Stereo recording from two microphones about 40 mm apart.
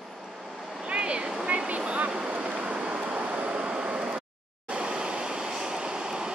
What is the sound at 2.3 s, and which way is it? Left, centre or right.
Vehicle, right.